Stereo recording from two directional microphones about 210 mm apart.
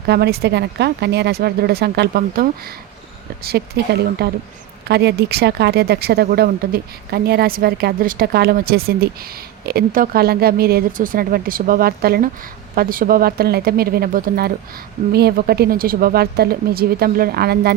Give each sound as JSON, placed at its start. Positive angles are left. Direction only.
{"t": 0.0, "sound": "speech", "side_deg": -50}